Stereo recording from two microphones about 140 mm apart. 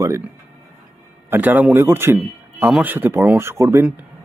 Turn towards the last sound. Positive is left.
turn(degrees=-20)  # may be behind; listen again after turning